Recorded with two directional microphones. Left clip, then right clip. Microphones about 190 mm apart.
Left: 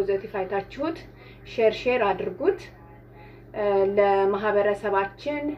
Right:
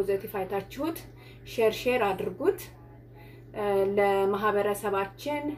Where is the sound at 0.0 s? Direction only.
15° right (ahead or behind).